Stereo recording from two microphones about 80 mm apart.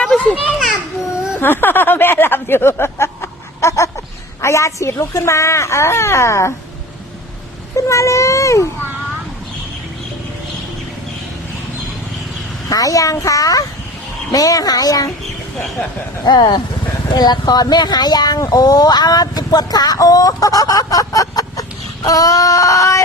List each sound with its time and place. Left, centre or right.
0.0 s children playing: centre
1.4 s a sound: left
4.4 s speech: left
7.8 s speech: left
12.6 s speech: left
16.2 s speech: left